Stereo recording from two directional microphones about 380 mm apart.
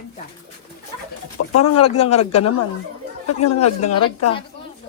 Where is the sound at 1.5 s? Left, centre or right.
Left.